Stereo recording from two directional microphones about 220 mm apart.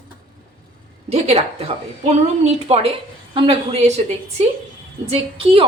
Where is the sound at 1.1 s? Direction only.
25° right (ahead or behind).